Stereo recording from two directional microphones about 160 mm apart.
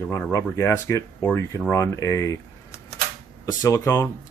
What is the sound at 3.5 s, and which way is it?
Speech, 20° left (ahead or behind).